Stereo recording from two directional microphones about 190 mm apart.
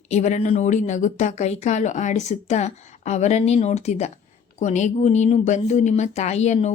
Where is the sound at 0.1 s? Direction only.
40° left (ahead or behind).